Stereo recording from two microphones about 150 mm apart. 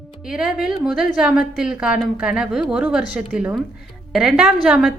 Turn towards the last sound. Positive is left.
turn(degrees=-5)  # may be behind; listen again after turning